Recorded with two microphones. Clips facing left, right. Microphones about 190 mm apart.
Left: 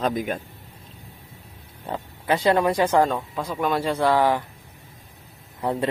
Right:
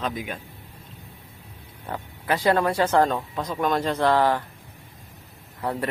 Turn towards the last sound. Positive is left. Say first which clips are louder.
# left 3 dB
turn(degrees=20)  # may be behind; listen again after turning